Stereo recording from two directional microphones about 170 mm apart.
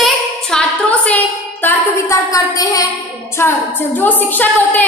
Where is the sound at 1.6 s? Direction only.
20° left (ahead or behind).